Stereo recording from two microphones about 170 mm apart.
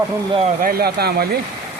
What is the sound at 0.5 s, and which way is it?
Speech, 60° right (ahead or behind).